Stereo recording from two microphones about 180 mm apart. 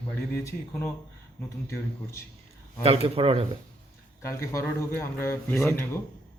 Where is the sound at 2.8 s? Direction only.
35° right (ahead or behind).